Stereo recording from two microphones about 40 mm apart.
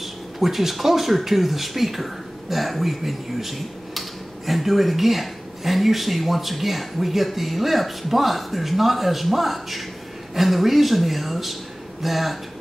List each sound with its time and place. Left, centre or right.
0.0 s speech: centre